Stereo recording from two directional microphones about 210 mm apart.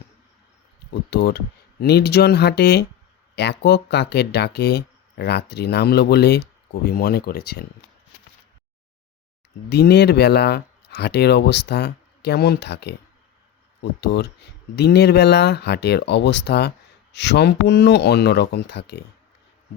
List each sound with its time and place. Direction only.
1.1 s speech: 50° left (ahead or behind)
9.6 s speech: 50° left (ahead or behind)
14.0 s speech: 50° left (ahead or behind)